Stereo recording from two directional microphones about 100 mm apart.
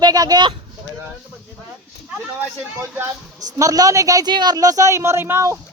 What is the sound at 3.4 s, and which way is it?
Speech, 35° right (ahead or behind).